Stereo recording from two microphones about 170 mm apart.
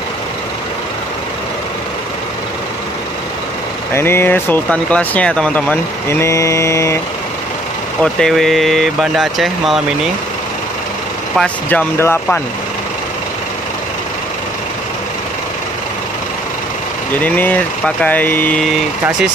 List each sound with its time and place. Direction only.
3.9 s speech: 15° left (ahead or behind)
8.0 s speech: 5° left (ahead or behind)
11.3 s speech: 10° left (ahead or behind)
17.1 s speech: 10° left (ahead or behind)